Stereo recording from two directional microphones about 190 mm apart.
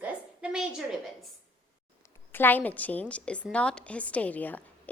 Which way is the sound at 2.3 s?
10° left (ahead or behind).